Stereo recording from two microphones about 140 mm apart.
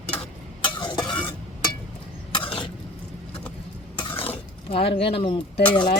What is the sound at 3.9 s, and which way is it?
Stir, 40° left (ahead or behind).